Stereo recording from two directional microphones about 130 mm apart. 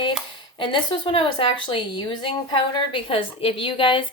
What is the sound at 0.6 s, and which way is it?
Speech, 40° left (ahead or behind).